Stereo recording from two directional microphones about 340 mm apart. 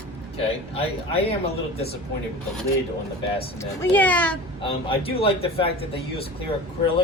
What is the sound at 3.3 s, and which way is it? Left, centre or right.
Speech, centre.